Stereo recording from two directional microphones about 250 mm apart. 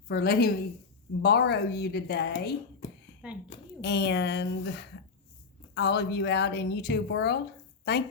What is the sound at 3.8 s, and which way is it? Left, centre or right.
Speech, left.